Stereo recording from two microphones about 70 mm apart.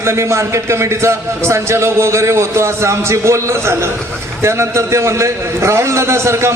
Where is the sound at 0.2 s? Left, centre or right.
Right.